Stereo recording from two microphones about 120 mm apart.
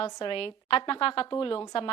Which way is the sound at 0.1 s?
45° left (ahead or behind).